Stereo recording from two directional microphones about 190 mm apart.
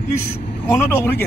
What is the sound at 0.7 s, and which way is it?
Speech, 10° left (ahead or behind).